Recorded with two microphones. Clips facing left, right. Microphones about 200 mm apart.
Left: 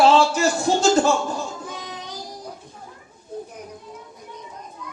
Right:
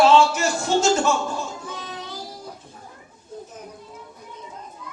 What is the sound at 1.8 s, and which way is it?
Child singing, 15° left (ahead or behind).